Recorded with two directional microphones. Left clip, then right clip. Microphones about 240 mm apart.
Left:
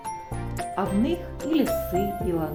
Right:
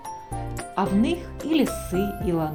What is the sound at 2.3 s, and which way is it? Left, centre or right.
Speech, centre.